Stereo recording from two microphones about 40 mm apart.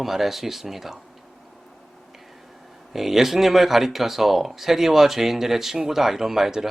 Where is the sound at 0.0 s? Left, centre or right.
Centre.